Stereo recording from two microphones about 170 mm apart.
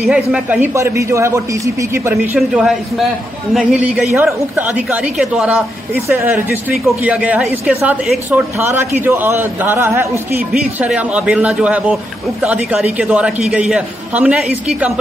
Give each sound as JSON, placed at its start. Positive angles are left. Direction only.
{"t": 0.3, "sound": "speech", "side_deg": -10}
{"t": 2.3, "sound": "a man's voice", "side_deg": 0}